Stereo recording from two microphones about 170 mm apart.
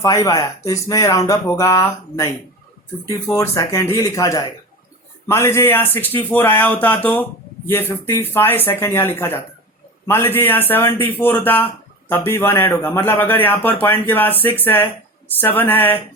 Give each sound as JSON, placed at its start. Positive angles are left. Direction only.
{"t": 0.0, "sound": "a man's voice", "side_deg": 20}